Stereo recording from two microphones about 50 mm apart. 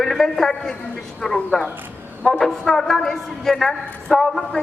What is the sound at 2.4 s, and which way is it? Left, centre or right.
A woman's voice, centre.